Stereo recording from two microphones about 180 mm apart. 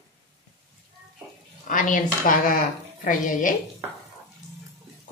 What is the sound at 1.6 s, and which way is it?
A woman's voice, 45° left (ahead or behind).